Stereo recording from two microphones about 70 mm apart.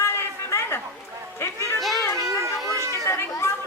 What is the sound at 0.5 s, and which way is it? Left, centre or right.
Chatter, left.